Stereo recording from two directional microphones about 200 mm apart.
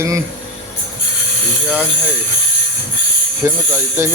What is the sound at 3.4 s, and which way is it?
Speech, 15° right (ahead or behind).